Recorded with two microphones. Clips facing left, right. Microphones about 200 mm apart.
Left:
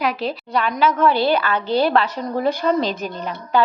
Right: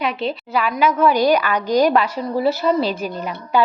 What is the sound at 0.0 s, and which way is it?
A woman's voice, centre (ahead or behind).